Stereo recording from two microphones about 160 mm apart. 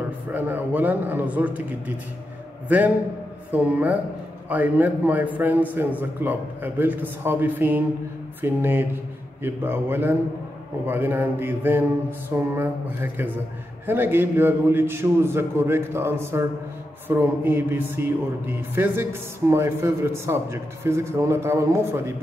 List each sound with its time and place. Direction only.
0.3 s a man's voice: 10° right (ahead or behind)
3.5 s a man's voice: 10° right (ahead or behind)